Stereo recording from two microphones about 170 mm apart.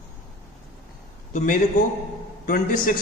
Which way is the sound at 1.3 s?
55° left (ahead or behind).